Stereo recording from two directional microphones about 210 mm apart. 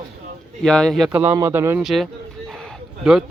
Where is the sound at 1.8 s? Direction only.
Centre (ahead or behind).